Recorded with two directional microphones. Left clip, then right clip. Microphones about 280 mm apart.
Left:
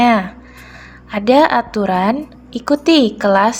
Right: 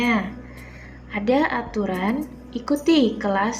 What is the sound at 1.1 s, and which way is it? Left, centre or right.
A woman's voice, left.